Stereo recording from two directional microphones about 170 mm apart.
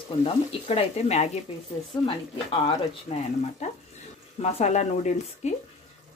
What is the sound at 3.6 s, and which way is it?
Speech, 40° left (ahead or behind).